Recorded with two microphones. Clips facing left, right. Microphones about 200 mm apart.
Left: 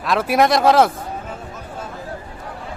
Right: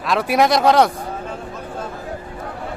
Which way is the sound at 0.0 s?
Centre (ahead or behind).